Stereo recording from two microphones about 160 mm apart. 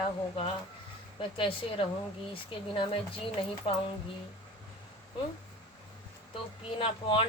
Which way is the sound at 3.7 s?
30° left (ahead or behind).